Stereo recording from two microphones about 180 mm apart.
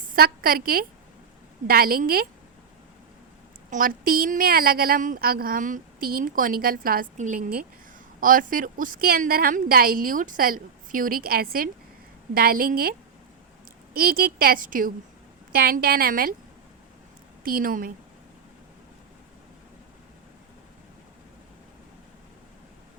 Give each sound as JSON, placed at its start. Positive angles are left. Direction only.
{"t": 0.2, "sound": "a woman's voice", "side_deg": -55}
{"t": 3.7, "sound": "a woman's voice", "side_deg": -50}
{"t": 17.4, "sound": "a woman's voice", "side_deg": -50}